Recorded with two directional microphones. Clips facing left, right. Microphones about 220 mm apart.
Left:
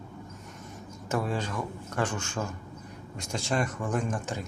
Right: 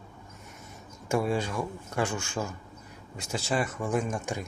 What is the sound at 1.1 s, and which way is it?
Speech, 10° right (ahead or behind).